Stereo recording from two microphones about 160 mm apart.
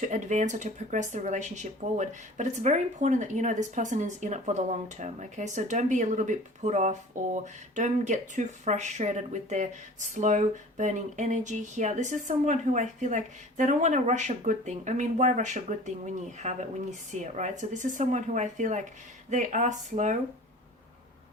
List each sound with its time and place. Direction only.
0.0 s speech: 50° right (ahead or behind)